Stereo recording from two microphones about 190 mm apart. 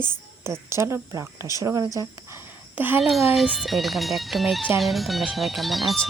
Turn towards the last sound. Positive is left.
turn(degrees=0)  # may be behind; listen again after turning